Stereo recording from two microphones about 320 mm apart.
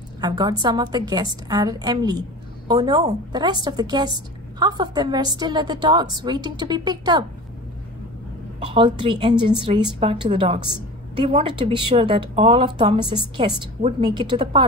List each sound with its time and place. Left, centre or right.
0.2 s a woman's voice: centre
8.5 s a woman's voice: centre